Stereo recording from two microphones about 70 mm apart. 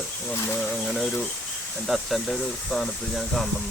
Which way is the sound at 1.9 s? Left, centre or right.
Centre.